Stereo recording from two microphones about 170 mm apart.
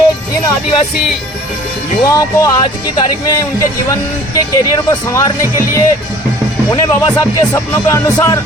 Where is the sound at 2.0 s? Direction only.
20° left (ahead or behind).